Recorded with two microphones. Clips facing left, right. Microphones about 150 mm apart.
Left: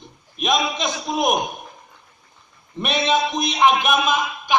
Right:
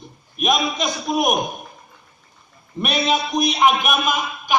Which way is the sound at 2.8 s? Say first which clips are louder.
Left 1 dB; 25° left (ahead or behind).